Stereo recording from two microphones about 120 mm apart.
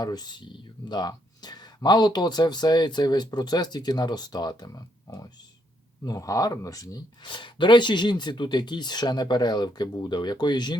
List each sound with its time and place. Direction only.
0.0 s speech: 35° left (ahead or behind)